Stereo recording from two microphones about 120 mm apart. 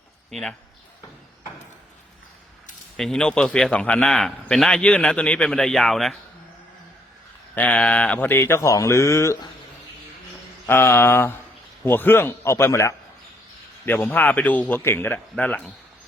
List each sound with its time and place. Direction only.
0.3 s speech: 5° left (ahead or behind)
3.0 s a man's voice: 5° left (ahead or behind)
7.5 s speech: 10° left (ahead or behind)
10.7 s a man's voice: 20° left (ahead or behind)